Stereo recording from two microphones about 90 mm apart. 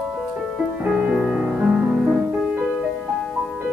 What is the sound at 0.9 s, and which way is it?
Music, 15° right (ahead or behind).